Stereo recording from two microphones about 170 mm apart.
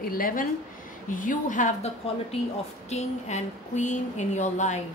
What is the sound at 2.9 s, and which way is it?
Speech, 45° left (ahead or behind).